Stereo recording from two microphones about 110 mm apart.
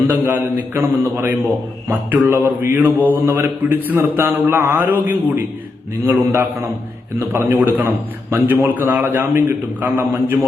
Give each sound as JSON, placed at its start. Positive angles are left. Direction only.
{"t": 0.1, "sound": "a man's voice", "side_deg": -20}